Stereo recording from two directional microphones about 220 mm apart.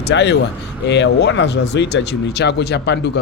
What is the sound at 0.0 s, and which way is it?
Speech, 50° left (ahead or behind).